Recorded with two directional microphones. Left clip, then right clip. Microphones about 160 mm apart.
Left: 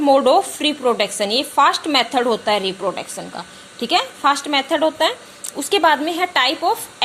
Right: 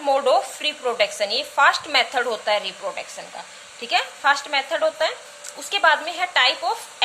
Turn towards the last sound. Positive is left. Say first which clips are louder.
# left 4 dB
turn(degrees=25)  # may be behind; listen again after turning